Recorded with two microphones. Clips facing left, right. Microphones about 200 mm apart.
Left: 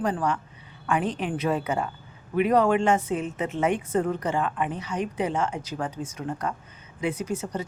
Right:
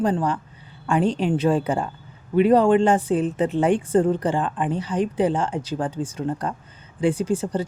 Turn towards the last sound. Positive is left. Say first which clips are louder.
# right 6 dB
turn(degrees=-30)  # may be behind; listen again after turning